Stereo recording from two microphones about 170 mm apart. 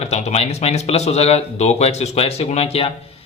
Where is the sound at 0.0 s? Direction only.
40° left (ahead or behind).